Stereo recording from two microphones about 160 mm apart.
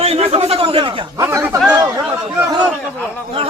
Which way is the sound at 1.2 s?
15° right (ahead or behind).